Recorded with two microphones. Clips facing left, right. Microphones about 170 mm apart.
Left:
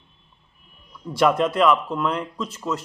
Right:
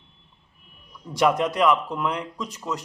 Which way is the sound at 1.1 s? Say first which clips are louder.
Left 2 dB; 15° right (ahead or behind).